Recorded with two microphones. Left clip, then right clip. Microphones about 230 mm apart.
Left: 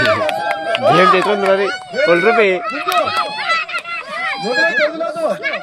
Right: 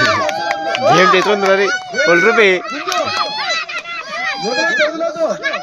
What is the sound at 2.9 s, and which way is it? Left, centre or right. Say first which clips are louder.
Run: left 1 dB; left.